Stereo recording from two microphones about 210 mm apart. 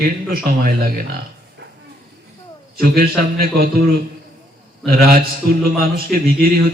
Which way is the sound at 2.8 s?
45° right (ahead or behind).